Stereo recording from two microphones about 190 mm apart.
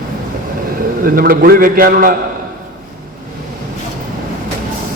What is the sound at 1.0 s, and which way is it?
A man's voice, 50° right (ahead or behind).